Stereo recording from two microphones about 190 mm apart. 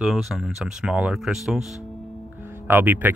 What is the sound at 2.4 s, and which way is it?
Music, 10° right (ahead or behind).